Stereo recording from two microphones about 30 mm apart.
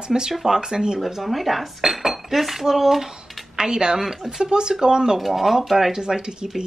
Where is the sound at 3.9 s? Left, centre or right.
Centre.